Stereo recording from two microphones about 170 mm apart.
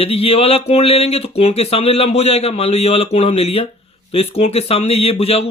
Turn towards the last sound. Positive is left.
turn(degrees=35)  # may be behind; listen again after turning